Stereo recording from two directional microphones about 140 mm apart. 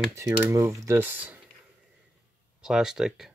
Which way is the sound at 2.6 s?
5° right (ahead or behind).